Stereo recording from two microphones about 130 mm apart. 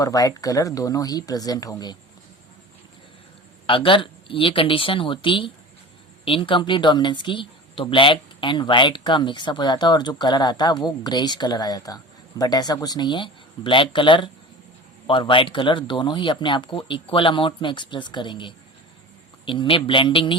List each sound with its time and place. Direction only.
0.0 s speech: 25° left (ahead or behind)
3.7 s speech: 40° left (ahead or behind)